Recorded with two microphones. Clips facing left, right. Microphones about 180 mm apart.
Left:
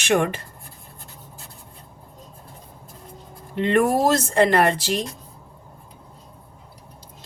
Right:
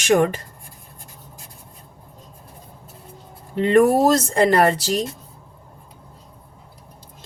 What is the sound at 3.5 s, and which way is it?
A woman's voice, 35° right (ahead or behind).